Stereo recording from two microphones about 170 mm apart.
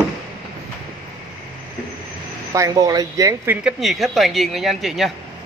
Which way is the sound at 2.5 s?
20° right (ahead or behind).